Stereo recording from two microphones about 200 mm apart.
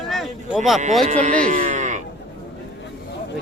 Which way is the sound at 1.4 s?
40° right (ahead or behind).